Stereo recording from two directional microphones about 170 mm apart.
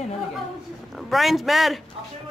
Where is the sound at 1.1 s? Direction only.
Centre (ahead or behind).